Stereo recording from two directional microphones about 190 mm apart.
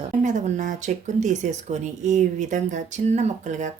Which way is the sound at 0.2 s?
40° right (ahead or behind).